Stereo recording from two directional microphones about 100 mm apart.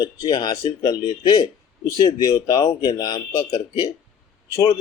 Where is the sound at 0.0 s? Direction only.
45° left (ahead or behind).